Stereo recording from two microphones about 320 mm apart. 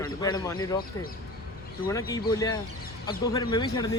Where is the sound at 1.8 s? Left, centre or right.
Centre.